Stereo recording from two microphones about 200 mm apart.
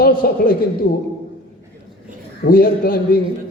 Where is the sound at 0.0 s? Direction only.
45° left (ahead or behind).